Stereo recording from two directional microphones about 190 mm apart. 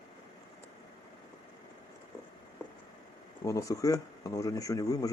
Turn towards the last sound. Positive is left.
turn(degrees=20)  # may be behind; listen again after turning